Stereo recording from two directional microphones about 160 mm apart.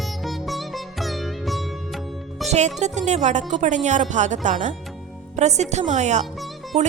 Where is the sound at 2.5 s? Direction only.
45° right (ahead or behind).